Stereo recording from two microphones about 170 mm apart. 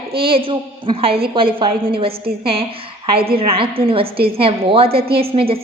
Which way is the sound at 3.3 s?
30° right (ahead or behind).